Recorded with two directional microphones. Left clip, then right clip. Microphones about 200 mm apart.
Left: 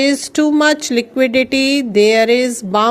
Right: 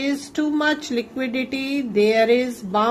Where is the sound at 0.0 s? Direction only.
35° left (ahead or behind).